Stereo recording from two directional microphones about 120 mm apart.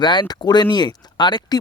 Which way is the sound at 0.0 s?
40° left (ahead or behind).